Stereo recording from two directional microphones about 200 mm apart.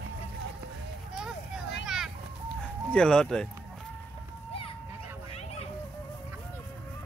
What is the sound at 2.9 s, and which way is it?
Speech, 5° left (ahead or behind).